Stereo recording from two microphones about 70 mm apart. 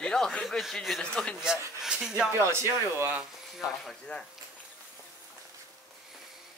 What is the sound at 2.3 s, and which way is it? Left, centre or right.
Speech, right.